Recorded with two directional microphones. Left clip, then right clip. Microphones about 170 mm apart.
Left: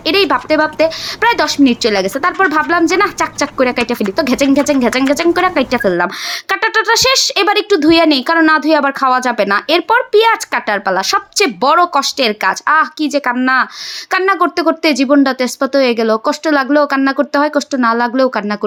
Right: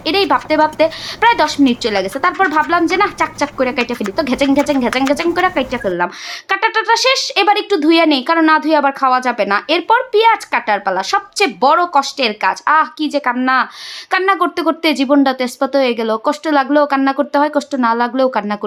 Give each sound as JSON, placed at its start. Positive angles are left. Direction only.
{"t": 0.0, "sound": "speech", "side_deg": 20}